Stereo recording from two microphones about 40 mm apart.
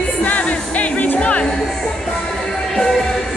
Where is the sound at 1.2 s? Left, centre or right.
Left.